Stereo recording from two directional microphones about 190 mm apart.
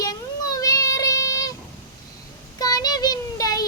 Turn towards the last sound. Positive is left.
turn(degrees=20)  # may be behind; listen again after turning